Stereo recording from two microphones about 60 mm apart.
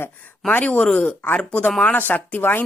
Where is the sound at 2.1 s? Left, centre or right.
Left.